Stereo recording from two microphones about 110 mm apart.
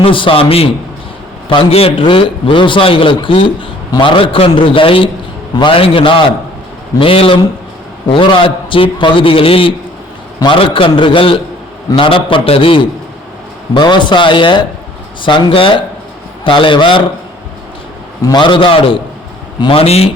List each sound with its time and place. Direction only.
0.0 s a man's voice: 55° left (ahead or behind)
13.7 s a man's voice: 45° left (ahead or behind)
18.2 s a man's voice: 40° left (ahead or behind); by 20.1 s 65° left (ahead or behind)